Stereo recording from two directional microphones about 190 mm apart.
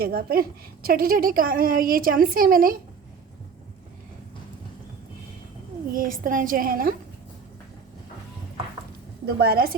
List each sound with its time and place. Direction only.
0.0 s a woman's voice: 50° right (ahead or behind)
5.9 s a woman's voice: 45° right (ahead or behind)
9.2 s a woman's voice: 55° right (ahead or behind)